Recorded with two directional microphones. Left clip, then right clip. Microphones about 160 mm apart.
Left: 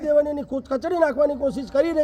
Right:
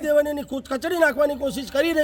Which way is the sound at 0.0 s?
30° right (ahead or behind).